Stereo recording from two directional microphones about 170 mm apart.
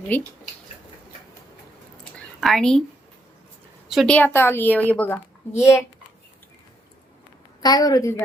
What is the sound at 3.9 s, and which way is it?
A woman's voice, centre (ahead or behind).